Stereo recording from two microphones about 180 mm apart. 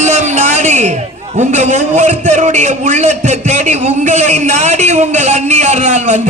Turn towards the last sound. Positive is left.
turn(degrees=-40)  # may be behind; listen again after turning